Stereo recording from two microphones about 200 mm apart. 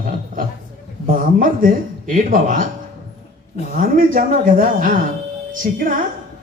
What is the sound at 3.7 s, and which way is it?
A man's voice, 45° right (ahead or behind).